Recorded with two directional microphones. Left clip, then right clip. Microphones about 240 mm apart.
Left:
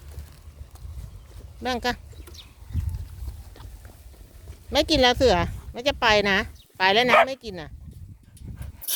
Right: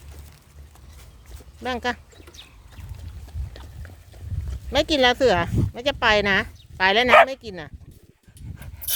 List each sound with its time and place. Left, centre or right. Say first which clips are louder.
1.6 s duck: even; centre
4.7 s speech: right 1 dB; centre
8.5 s dog: right 4 dB; right